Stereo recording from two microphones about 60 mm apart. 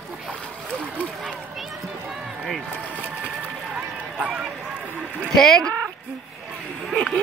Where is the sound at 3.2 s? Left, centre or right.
Centre.